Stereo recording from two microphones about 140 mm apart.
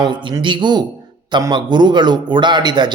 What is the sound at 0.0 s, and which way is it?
A man's voice, 35° right (ahead or behind).